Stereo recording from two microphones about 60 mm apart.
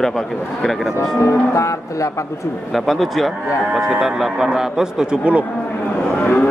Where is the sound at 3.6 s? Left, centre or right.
Centre.